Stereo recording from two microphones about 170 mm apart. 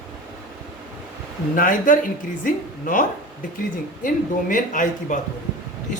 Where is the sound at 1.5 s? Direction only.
50° left (ahead or behind).